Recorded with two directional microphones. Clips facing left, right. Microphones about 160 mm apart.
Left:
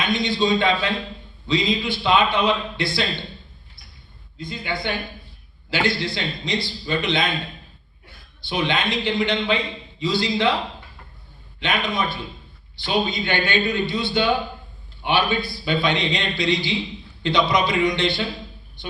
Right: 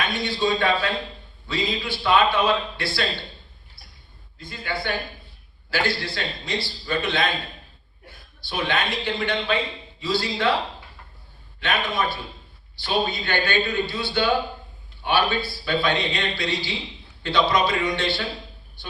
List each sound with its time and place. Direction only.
0.0 s a man's voice: 15° left (ahead or behind)
4.4 s a man's voice: 20° left (ahead or behind)
8.4 s a man's voice: 15° left (ahead or behind)
11.6 s a man's voice: 15° left (ahead or behind)